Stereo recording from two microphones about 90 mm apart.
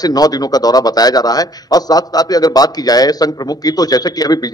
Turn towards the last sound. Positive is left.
turn(degrees=45)  # may be behind; listen again after turning